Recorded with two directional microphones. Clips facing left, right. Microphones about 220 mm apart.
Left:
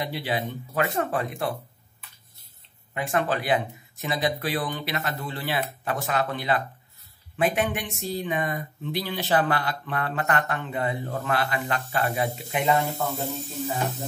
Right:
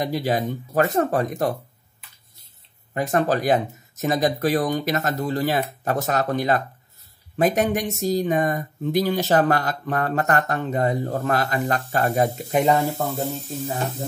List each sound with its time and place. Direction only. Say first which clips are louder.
0.0 s speech: right 6 dB; 45° right (ahead or behind)
2.9 s speech: right 5 dB; 40° right (ahead or behind)